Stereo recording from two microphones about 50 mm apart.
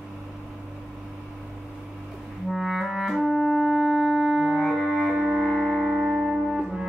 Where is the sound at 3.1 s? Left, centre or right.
Centre.